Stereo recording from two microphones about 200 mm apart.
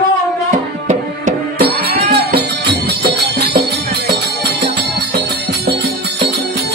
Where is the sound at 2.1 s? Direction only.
55° right (ahead or behind).